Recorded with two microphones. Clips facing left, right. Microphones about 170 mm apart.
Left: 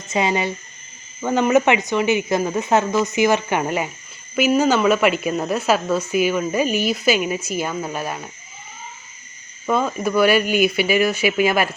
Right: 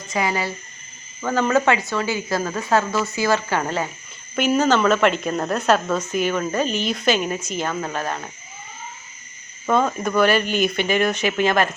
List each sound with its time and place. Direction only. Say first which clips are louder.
0.1 s a woman's voice: left 3 dB; 25° left (ahead or behind)
9.6 s a woman's voice: even; 5° left (ahead or behind)